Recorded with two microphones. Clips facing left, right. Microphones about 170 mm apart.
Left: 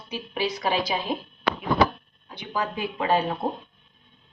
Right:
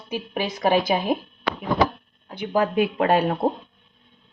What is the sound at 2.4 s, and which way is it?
Speech, 55° right (ahead or behind).